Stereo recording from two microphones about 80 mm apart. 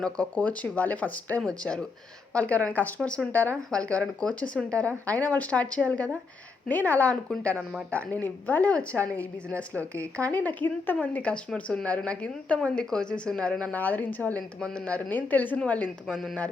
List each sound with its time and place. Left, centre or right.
0.0 s a woman's voice: centre
14.6 s speech: centre